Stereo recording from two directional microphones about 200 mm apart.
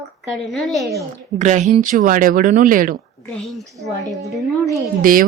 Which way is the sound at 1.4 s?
35° right (ahead or behind).